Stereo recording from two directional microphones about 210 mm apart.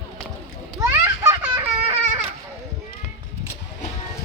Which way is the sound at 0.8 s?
15° right (ahead or behind).